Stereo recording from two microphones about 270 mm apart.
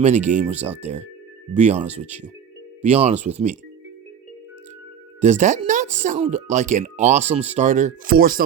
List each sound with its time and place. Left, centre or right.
0.0 s speech: right
5.2 s speech: right